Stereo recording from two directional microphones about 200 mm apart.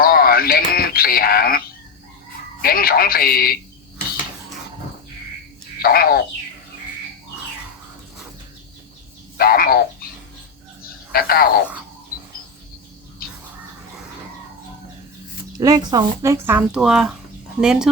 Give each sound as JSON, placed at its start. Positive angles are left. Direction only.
{"t": 0.0, "sound": "a sound", "side_deg": 50}
{"t": 2.6, "sound": "speech", "side_deg": 50}
{"t": 5.8, "sound": "speech", "side_deg": 50}
{"t": 9.4, "sound": "frog", "side_deg": 50}
{"t": 11.1, "sound": "speech", "side_deg": 50}
{"t": 15.5, "sound": "speech", "side_deg": -20}